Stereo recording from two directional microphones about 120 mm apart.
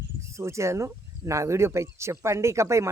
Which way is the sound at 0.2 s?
25° right (ahead or behind).